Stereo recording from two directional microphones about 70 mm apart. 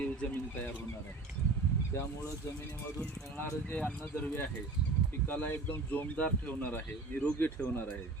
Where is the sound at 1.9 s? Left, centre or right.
Left.